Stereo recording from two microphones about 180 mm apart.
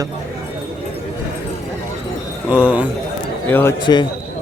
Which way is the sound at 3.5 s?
10° left (ahead or behind).